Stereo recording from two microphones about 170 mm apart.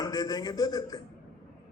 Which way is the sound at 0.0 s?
25° left (ahead or behind).